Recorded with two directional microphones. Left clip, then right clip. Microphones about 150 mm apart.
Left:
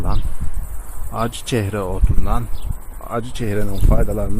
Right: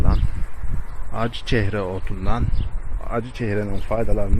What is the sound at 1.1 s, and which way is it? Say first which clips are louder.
Speech: left 2 dB; 15° left (ahead or behind).